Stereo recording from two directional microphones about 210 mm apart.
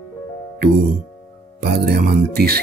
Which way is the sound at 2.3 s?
45° right (ahead or behind).